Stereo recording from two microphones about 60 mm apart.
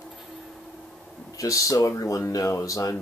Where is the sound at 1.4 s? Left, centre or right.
Left.